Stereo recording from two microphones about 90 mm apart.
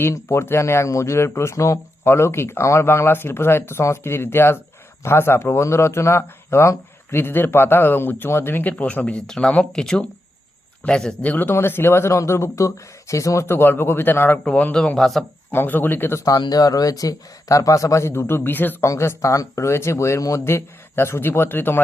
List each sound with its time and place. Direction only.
0.0 s speech: 30° left (ahead or behind)
14.4 s speech: 10° left (ahead or behind)
15.5 s speech: 20° left (ahead or behind)
16.4 s speech: 45° left (ahead or behind); by 18.9 s 20° left (ahead or behind)
18.9 s speech: 35° left (ahead or behind)